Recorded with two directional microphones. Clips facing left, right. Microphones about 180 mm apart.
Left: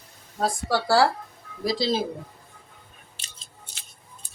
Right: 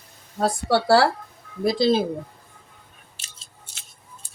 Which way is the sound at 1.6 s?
55° right (ahead or behind).